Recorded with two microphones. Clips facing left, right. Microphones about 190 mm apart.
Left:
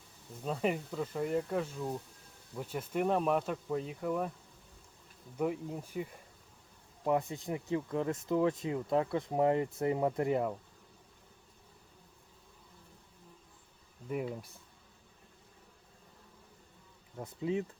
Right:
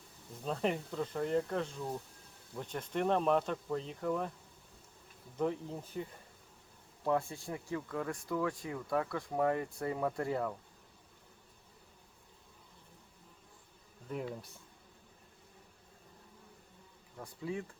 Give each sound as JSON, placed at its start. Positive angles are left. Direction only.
{"t": 0.4, "sound": "speech", "side_deg": 5}
{"t": 5.4, "sound": "speech", "side_deg": 10}
{"t": 14.1, "sound": "speech", "side_deg": 10}
{"t": 17.2, "sound": "speech", "side_deg": 20}